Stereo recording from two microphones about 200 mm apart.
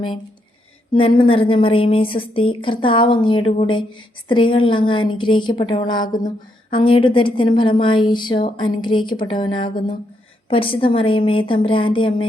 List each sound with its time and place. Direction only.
0.9 s a woman's voice: 25° left (ahead or behind)